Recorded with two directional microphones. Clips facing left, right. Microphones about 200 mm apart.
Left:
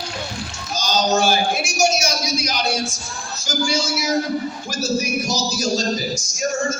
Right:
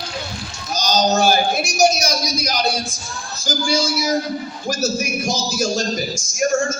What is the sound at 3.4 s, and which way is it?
Speech, 35° right (ahead or behind).